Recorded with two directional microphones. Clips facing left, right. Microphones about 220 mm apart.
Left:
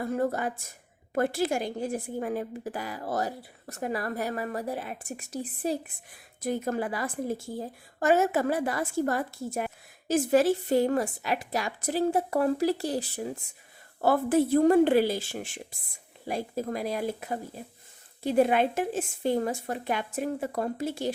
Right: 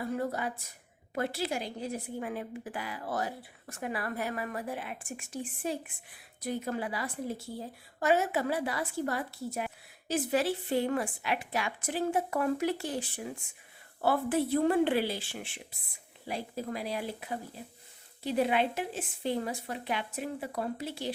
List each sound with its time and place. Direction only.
0.0 s a woman's voice: 45° left (ahead or behind)